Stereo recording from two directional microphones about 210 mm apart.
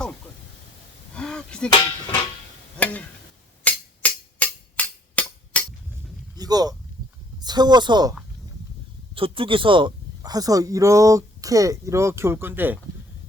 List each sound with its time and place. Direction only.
1.1 s a sound: 5° left (ahead or behind)
1.7 s speech: 20° left (ahead or behind)
2.7 s stir: 5° left (ahead or behind)
3.6 s music: 5° left (ahead or behind)
6.3 s a sound: 20° right (ahead or behind)
7.4 s speech: 20° right (ahead or behind)
9.1 s speech: 25° right (ahead or behind); by 12.8 s 10° right (ahead or behind)